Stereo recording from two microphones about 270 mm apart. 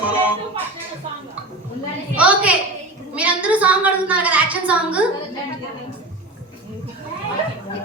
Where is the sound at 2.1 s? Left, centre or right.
Centre.